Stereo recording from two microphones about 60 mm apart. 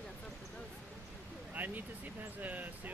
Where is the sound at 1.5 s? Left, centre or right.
Right.